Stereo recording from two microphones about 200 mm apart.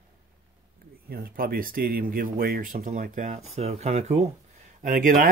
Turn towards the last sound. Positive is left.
turn(degrees=-45)  # may be behind; listen again after turning